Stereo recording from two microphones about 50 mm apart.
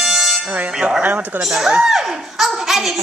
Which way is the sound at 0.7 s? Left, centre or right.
Centre.